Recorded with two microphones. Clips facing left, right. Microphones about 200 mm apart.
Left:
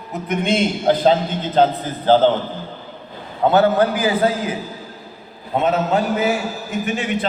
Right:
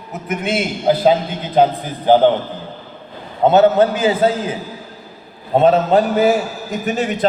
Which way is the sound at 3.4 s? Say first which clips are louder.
Right 3 dB; 20° right (ahead or behind).